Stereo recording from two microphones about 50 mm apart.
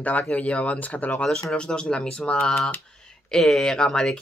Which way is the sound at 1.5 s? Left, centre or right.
Centre.